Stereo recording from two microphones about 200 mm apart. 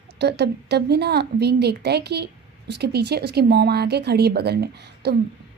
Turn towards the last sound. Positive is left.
turn(degrees=-55)  # may be behind; listen again after turning